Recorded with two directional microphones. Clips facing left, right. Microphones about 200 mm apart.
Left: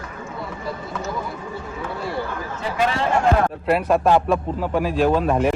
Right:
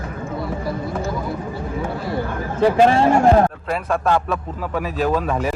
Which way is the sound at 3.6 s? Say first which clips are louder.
Left 3 dB; 5° left (ahead or behind).